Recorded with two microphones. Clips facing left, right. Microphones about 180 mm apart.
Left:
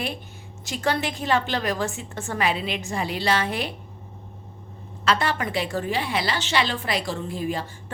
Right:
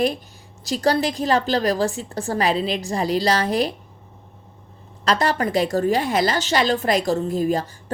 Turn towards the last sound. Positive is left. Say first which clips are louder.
# right 7 dB
turn(degrees=-40)  # may be behind; listen again after turning